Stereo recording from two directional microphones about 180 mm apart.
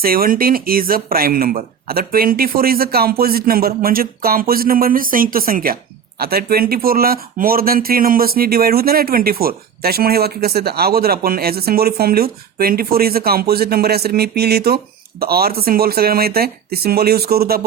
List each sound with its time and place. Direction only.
0.0 s speech: 55° right (ahead or behind)